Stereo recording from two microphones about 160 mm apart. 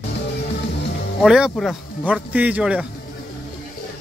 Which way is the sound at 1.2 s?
5° right (ahead or behind).